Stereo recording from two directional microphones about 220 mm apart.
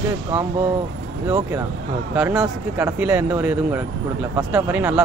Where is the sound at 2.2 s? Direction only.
5° right (ahead or behind).